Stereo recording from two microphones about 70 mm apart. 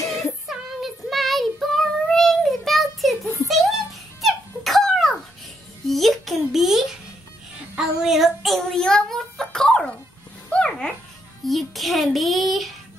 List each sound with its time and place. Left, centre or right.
0.0 s child singing: left
0.5 s child singing: centre
3.4 s a sound: centre
7.7 s child singing: centre
8.7 s a sound: centre
10.5 s dog: centre
11.4 s music: centre